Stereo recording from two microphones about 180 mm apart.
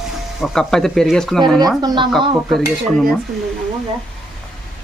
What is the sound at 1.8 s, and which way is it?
Speech, 25° right (ahead or behind).